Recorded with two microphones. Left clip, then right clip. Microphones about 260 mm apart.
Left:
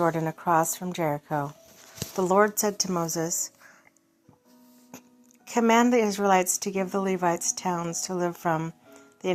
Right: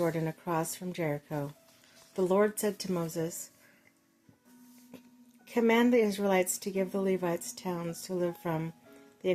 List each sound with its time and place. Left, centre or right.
0.0 s a woman's voice: centre
5.5 s speech: centre